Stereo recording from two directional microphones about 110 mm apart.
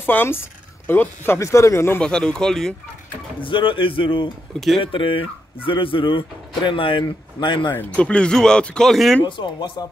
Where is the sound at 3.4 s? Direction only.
50° left (ahead or behind).